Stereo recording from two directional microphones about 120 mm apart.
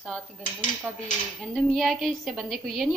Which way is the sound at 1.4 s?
Centre (ahead or behind).